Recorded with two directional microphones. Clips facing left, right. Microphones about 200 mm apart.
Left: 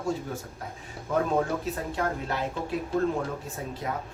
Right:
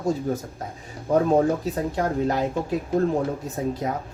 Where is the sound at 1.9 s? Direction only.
40° right (ahead or behind).